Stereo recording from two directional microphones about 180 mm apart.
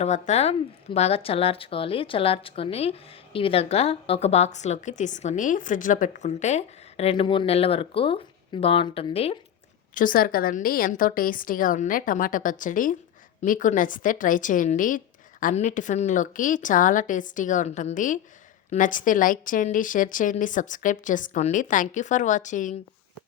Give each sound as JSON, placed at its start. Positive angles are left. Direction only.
{"t": 0.0, "sound": "speech", "side_deg": 40}
{"t": 9.9, "sound": "a woman's voice", "side_deg": 50}